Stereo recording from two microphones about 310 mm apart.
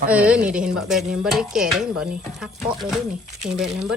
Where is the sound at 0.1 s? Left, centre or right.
Centre.